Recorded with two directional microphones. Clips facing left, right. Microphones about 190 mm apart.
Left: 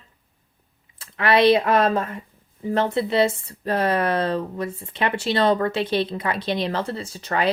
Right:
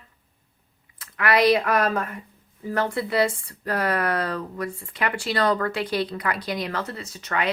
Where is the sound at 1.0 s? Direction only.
25° left (ahead or behind).